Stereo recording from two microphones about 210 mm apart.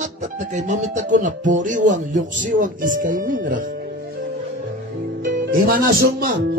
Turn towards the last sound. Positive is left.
turn(degrees=-45)  # may be behind; listen again after turning